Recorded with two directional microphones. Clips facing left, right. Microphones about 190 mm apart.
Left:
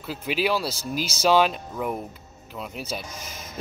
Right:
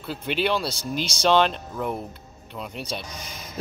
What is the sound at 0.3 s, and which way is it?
Speech, 5° left (ahead or behind).